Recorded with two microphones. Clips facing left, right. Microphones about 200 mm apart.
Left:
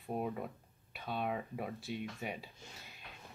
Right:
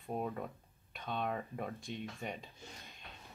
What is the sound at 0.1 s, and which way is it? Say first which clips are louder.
Speech: left 1 dB; 5° left (ahead or behind).